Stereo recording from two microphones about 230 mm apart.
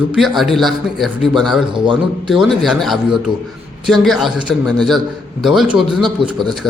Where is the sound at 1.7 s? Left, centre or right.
Right.